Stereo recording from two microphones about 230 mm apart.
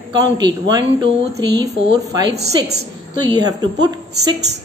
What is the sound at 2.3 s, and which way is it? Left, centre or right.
Speech, right.